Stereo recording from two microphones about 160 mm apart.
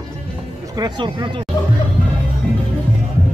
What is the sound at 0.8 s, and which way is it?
Speech, 30° right (ahead or behind).